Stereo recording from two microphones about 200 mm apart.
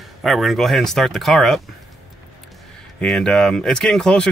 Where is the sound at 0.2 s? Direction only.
Centre (ahead or behind).